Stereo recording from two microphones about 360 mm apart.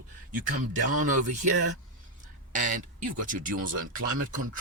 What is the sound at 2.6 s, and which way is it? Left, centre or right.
Speech, right.